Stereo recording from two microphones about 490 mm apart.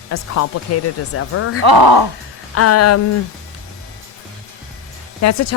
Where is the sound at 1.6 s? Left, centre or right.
Right.